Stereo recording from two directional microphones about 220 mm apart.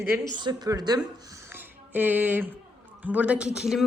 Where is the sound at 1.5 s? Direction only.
10° right (ahead or behind).